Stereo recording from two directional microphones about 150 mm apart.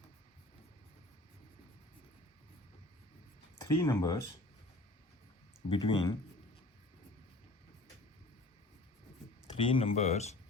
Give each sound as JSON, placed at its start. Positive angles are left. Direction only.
{"t": 3.6, "sound": "speech", "side_deg": 25}
{"t": 5.6, "sound": "speech", "side_deg": 35}
{"t": 9.6, "sound": "speech", "side_deg": 35}